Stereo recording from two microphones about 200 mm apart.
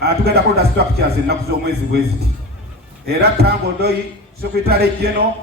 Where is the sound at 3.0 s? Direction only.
55° right (ahead or behind).